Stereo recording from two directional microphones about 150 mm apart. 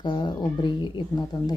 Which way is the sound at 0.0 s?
30° left (ahead or behind).